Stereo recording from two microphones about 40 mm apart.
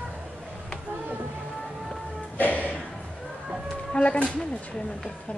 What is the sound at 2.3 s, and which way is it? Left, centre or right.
Music, left.